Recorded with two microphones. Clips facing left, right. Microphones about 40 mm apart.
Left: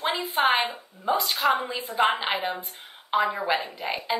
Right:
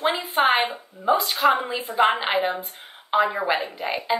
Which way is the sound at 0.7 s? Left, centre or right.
Centre.